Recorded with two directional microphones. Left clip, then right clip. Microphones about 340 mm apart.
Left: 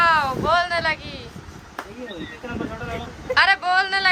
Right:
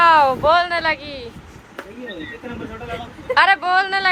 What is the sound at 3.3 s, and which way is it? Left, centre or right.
Speech, centre.